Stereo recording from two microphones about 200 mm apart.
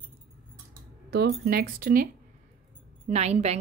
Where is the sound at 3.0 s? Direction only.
35° right (ahead or behind).